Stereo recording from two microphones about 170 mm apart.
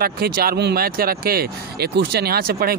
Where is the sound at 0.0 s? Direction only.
65° right (ahead or behind).